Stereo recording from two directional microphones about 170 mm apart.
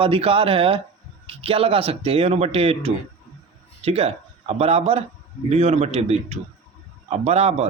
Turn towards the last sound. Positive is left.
turn(degrees=-40)  # may be behind; listen again after turning